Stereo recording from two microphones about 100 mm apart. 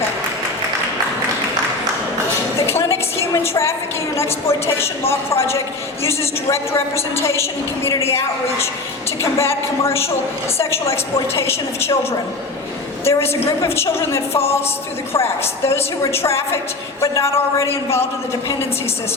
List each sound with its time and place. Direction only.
2.6 s a sound: 25° left (ahead or behind)
4.2 s a woman's voice: 25° left (ahead or behind)
13.1 s a woman's voice: 25° left (ahead or behind)